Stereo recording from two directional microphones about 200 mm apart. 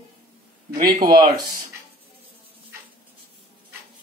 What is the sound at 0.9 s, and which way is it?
Speech, 45° right (ahead or behind).